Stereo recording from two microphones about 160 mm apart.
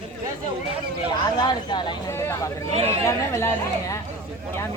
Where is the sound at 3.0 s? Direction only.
20° left (ahead or behind).